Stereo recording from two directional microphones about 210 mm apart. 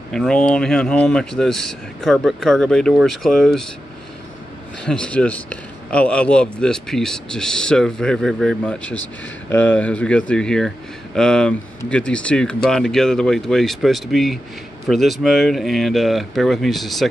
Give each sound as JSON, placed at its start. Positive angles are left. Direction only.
{"t": 0.1, "sound": "speech", "side_deg": 5}
{"t": 4.8, "sound": "speech", "side_deg": 5}